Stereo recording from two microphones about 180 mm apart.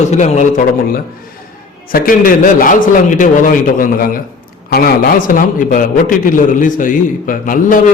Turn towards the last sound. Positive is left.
turn(degrees=45)  # may be behind; listen again after turning